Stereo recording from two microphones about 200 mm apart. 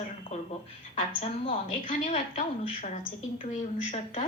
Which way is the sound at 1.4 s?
30° left (ahead or behind).